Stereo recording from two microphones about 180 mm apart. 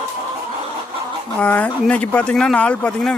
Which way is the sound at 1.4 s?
10° left (ahead or behind).